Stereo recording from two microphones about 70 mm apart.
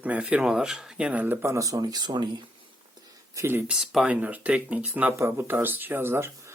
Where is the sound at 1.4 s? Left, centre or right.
Right.